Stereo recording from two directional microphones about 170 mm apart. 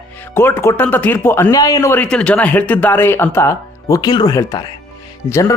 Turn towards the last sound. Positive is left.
turn(degrees=20)  # may be behind; listen again after turning